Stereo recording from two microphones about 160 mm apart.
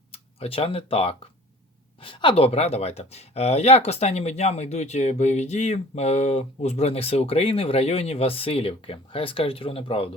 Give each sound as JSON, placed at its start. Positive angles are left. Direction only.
{"t": 0.1, "sound": "speech", "side_deg": 35}